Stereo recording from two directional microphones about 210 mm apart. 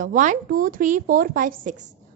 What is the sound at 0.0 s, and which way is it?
A woman's voice, 35° right (ahead or behind).